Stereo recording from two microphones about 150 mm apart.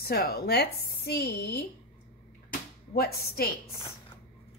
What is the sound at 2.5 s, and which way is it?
Music, 90° left.